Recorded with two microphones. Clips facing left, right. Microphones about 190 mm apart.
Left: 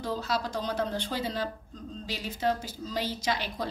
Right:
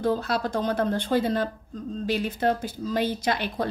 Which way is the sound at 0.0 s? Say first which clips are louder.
Right 6 dB; 55° right (ahead or behind).